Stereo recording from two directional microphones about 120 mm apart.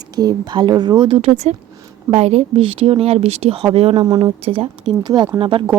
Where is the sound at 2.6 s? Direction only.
50° right (ahead or behind).